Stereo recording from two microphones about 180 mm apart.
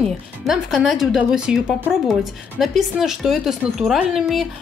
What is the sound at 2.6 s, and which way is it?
A woman's voice, centre (ahead or behind).